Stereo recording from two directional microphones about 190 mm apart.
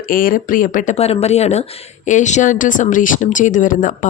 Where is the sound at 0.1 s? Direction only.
45° left (ahead or behind).